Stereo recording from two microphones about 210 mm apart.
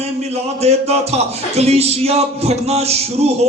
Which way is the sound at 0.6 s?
30° right (ahead or behind).